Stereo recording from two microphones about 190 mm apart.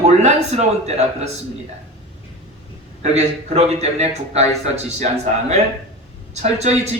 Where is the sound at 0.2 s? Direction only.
35° right (ahead or behind).